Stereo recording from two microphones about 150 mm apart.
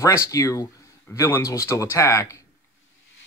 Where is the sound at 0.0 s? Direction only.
20° left (ahead or behind).